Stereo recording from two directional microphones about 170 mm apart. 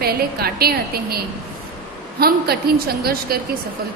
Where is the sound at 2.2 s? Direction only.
65° right (ahead or behind).